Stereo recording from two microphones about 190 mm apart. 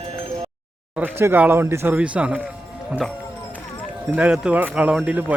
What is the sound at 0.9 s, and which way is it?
A man's voice, 10° right (ahead or behind).